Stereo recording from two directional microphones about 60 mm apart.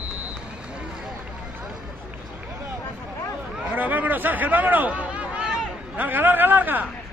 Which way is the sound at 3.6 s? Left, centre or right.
Right.